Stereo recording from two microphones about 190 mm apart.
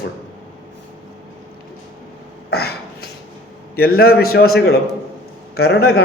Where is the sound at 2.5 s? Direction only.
55° left (ahead or behind).